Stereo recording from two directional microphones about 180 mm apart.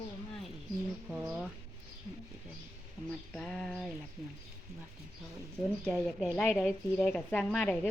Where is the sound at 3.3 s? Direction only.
5° left (ahead or behind).